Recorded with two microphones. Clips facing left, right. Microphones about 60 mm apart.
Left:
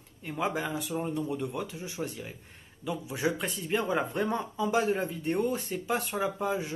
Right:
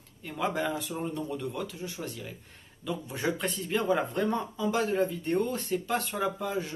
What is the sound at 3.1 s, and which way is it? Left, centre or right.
Speech, centre.